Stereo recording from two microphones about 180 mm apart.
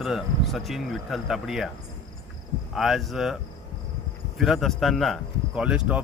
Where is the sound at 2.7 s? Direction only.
Centre (ahead or behind).